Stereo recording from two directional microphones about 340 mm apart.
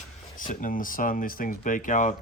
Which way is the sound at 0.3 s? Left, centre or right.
Left.